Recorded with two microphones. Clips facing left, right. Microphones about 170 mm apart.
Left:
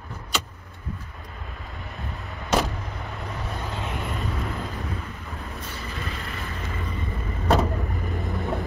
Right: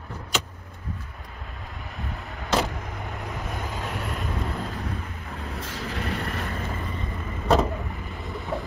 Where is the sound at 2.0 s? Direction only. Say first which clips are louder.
Right 2 dB; centre (ahead or behind).